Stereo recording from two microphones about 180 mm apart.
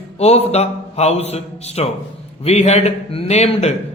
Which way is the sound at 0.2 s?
35° left (ahead or behind).